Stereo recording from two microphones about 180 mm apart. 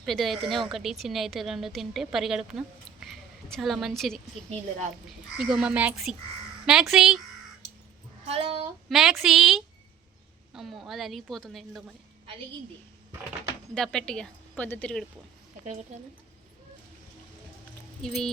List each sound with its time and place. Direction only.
0.0 s a woman's voice: centre (ahead or behind)
8.3 s speech: 35° right (ahead or behind)
8.9 s a woman's voice: centre (ahead or behind)
13.7 s a woman's voice: 5° left (ahead or behind)
18.0 s a woman's voice: centre (ahead or behind)